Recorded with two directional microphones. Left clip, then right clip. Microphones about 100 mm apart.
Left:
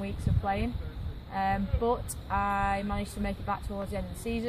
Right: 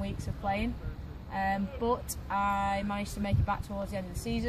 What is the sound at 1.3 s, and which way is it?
Speech, 35° left (ahead or behind).